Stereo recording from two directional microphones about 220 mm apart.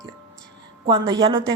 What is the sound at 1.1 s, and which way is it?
Speech, 20° right (ahead or behind).